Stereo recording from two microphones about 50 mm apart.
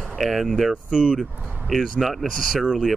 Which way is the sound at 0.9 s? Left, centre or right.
Centre.